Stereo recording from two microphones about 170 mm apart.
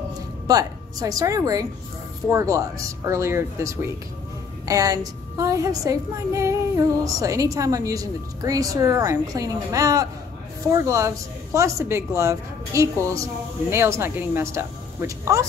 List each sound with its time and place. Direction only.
0.5 s a woman's voice: 20° right (ahead or behind)